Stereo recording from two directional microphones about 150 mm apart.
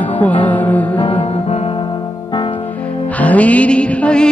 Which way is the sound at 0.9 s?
40° left (ahead or behind).